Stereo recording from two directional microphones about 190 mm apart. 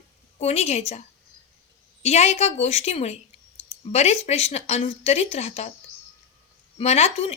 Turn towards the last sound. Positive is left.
turn(degrees=35)  # may be behind; listen again after turning